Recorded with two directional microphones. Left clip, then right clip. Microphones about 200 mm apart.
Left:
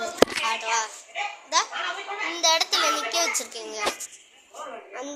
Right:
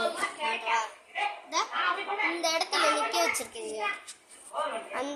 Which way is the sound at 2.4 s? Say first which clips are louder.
Left 8 dB; 15° left (ahead or behind).